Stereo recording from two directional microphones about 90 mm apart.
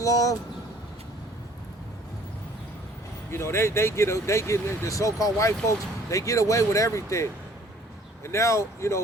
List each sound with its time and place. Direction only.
0.0 s speech: 40° left (ahead or behind)
3.3 s speech: 30° left (ahead or behind)